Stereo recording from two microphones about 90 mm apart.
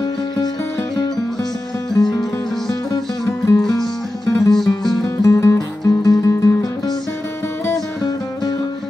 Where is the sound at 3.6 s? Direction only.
5° left (ahead or behind).